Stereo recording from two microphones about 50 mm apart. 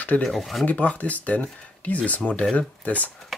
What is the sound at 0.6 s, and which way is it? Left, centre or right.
Speech, left.